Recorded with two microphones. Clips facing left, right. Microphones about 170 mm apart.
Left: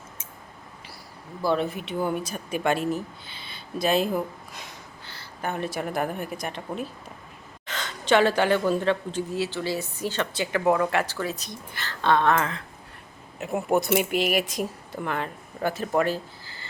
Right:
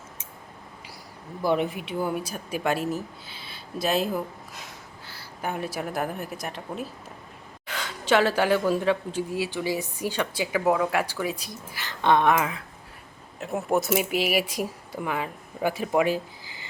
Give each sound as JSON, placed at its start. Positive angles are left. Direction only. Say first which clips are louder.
{"t": 1.5, "sound": "speech", "louder": "even", "side_deg": -15}